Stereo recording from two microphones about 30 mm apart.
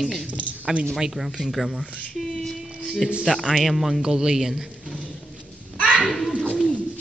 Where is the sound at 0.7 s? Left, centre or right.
Right.